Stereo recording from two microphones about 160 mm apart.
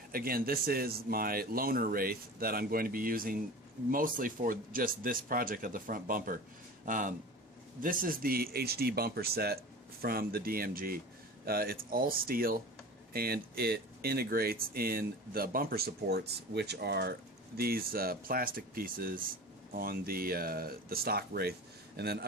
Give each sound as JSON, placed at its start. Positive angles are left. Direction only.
{"t": 0.1, "sound": "speech", "side_deg": -70}
{"t": 17.6, "sound": "speech", "side_deg": -70}